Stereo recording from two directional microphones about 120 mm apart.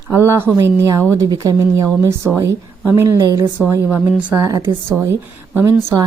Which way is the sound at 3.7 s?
15° right (ahead or behind).